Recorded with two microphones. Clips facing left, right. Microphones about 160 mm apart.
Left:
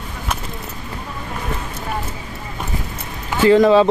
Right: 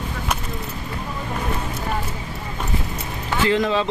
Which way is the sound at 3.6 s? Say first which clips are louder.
Left 9 dB; 45° left (ahead or behind).